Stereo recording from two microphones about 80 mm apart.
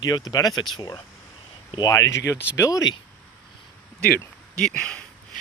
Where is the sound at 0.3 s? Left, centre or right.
Left.